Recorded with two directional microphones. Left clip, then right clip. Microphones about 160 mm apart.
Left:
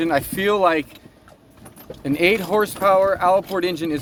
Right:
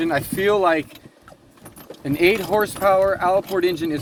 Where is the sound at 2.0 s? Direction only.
35° left (ahead or behind).